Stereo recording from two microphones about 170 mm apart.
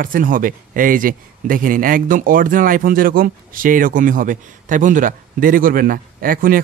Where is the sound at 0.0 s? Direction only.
55° right (ahead or behind).